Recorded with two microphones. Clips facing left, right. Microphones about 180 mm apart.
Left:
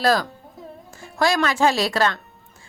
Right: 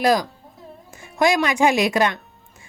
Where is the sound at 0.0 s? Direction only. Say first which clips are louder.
Right 1 dB; 15° right (ahead or behind).